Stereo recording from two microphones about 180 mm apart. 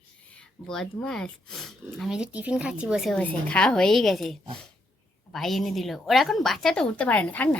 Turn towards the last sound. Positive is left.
turn(degrees=10)  # may be behind; listen again after turning